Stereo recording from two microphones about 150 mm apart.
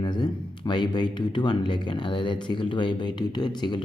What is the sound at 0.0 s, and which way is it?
Speech, 30° left (ahead or behind).